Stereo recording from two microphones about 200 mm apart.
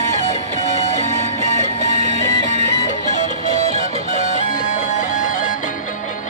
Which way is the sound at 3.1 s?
35° left (ahead or behind).